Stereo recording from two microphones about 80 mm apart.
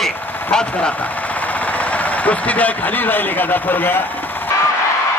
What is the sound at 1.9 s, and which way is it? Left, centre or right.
Speech, centre.